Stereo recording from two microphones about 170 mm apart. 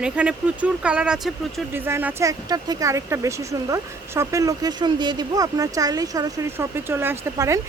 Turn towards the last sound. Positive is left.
turn(degrees=-15)  # may be behind; listen again after turning